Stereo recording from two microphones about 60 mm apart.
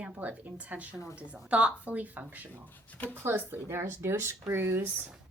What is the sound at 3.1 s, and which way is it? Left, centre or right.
A woman's voice, right.